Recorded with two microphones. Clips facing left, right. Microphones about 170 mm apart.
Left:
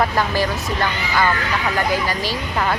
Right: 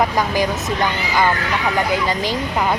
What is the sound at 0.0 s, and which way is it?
Speech, 15° right (ahead or behind).